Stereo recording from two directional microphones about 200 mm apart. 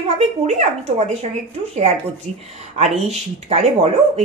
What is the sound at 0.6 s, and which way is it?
Speech, 35° right (ahead or behind).